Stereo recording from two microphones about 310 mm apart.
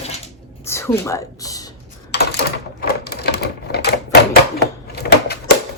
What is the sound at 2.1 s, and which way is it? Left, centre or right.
Typewriter, left.